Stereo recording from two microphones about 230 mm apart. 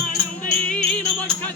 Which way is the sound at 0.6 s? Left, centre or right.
Centre.